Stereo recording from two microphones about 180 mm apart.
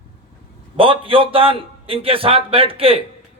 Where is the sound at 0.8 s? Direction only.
30° right (ahead or behind).